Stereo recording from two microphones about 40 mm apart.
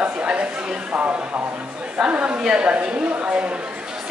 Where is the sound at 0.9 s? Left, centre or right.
Right.